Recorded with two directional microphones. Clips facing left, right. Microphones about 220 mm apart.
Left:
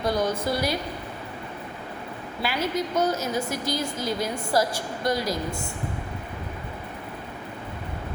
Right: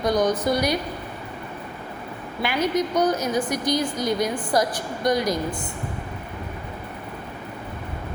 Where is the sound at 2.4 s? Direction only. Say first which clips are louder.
Right 4 dB; 20° right (ahead or behind).